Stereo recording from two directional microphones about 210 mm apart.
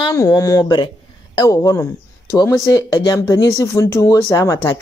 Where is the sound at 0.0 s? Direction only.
20° left (ahead or behind).